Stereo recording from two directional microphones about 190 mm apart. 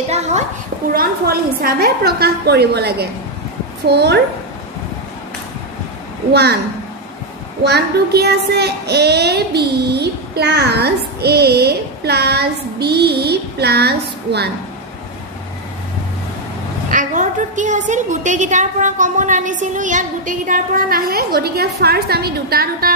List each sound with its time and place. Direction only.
0.1 s a woman's voice: 35° right (ahead or behind)
0.9 s child singing: 50° right (ahead or behind)
7.6 s child singing: 60° right (ahead or behind)
16.9 s a woman's voice: 40° right (ahead or behind)